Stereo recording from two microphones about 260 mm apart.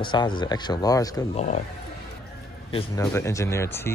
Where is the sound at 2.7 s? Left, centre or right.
Left.